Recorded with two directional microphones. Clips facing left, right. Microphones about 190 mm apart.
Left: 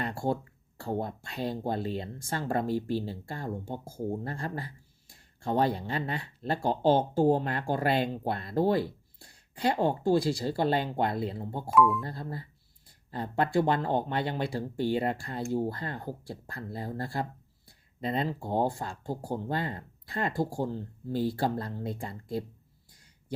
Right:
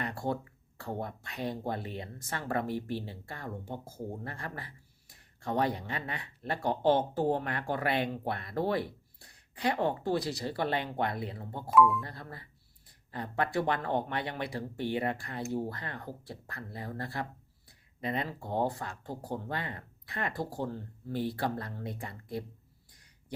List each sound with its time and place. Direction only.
0.0 s a sound: 30° left (ahead or behind)
0.8 s speech: 30° left (ahead or behind)
11.7 s speech: centre (ahead or behind)
12.0 s speech: 30° left (ahead or behind)